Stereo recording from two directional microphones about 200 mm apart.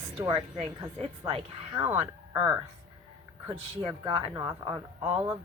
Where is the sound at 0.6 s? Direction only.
30° right (ahead or behind).